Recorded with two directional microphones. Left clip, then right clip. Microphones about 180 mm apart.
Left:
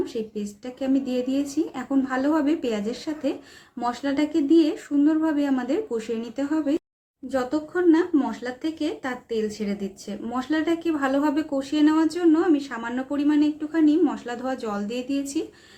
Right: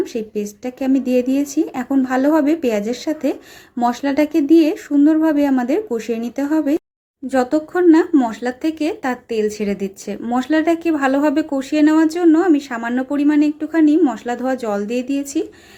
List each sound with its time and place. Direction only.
0.0 s speech: 35° right (ahead or behind)